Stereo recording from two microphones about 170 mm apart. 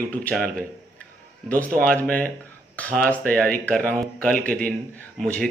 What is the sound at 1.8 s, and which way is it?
Speech, 5° left (ahead or behind).